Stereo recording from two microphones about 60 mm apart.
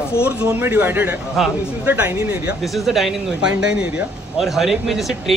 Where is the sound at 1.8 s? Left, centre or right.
Right.